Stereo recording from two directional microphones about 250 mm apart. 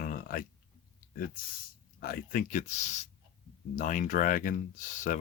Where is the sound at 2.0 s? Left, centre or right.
Left.